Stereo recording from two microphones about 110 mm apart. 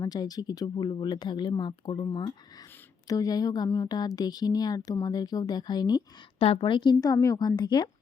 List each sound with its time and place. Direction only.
0.0 s speech: 35° left (ahead or behind)
6.4 s speech: 55° left (ahead or behind)
7.0 s speech: 30° left (ahead or behind)